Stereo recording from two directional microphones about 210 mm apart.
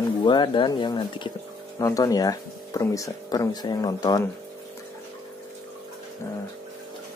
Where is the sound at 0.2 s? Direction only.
20° left (ahead or behind).